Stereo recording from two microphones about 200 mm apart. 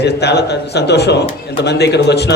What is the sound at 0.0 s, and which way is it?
A man's voice, 55° left (ahead or behind).